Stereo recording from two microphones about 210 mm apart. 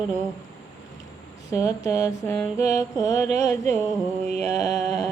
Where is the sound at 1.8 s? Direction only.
15° left (ahead or behind).